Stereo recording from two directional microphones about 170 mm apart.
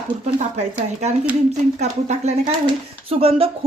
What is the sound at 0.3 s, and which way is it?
Speech, 40° right (ahead or behind).